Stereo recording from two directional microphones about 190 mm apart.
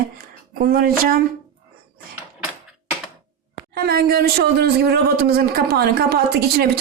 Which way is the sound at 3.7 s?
55° right (ahead or behind).